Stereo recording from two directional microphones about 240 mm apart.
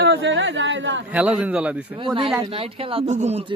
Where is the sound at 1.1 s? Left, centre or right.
Centre.